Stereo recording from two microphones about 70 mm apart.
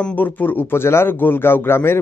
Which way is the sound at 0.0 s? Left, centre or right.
Left.